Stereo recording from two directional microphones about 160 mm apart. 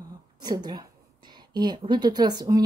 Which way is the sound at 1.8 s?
25° right (ahead or behind).